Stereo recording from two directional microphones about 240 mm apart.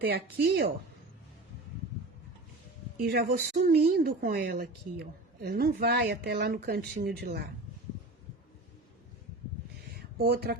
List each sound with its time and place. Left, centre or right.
0.0 s speech: right
3.0 s speech: right
9.9 s a sound: right